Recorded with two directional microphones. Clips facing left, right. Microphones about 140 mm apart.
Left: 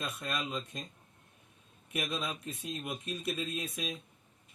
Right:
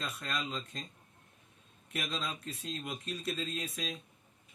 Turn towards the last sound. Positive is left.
turn(degrees=15)  # may be behind; listen again after turning